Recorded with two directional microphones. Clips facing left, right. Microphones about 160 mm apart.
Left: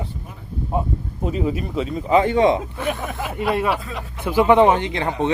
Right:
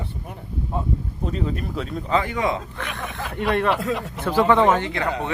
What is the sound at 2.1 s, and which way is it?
Speech, 20° left (ahead or behind).